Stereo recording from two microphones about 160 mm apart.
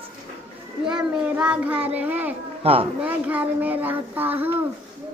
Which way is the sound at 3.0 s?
10° right (ahead or behind).